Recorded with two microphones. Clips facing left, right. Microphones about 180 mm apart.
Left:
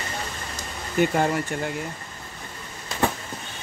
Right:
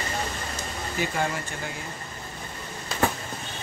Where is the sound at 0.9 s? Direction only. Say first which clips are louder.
Left 7 dB; 55° left (ahead or behind).